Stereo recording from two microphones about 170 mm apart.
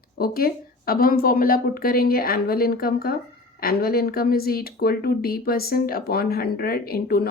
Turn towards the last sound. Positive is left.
turn(degrees=60)  # may be behind; listen again after turning